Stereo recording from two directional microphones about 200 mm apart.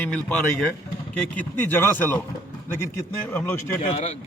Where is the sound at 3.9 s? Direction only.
30° left (ahead or behind).